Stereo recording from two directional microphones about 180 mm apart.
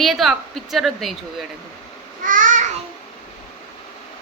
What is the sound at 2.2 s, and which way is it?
Babbling, 50° right (ahead or behind).